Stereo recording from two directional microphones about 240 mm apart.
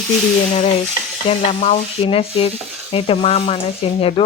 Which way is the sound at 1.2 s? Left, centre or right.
Left.